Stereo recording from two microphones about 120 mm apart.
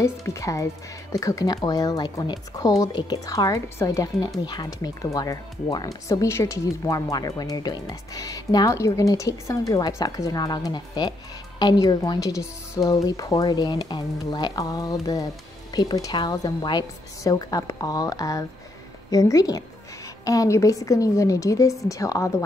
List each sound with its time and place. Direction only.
0.0 s speech: 25° left (ahead or behind)